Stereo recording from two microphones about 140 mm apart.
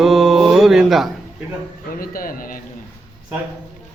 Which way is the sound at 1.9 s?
90° left.